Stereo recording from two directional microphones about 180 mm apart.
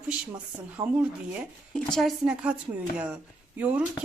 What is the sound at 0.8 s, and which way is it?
Speech, 20° right (ahead or behind).